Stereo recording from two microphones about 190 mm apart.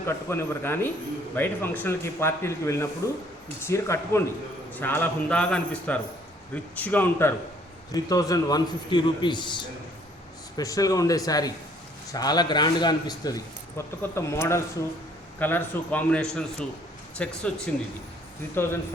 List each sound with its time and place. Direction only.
0.0 s a man's voice: 15° left (ahead or behind)
18.5 s speech: 10° left (ahead or behind)